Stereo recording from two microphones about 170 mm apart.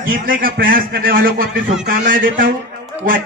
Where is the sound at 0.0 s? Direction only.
55° right (ahead or behind).